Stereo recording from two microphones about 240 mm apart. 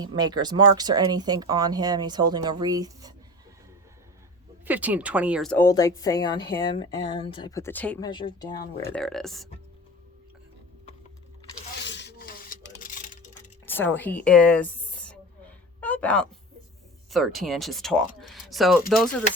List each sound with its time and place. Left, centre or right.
0.0 s speech: centre
4.6 s speech: centre
8.1 s speech: centre
9.0 s speech: centre
11.8 s rub: left
12.8 s a sound: left
13.7 s a sound: centre
17.1 s speech: centre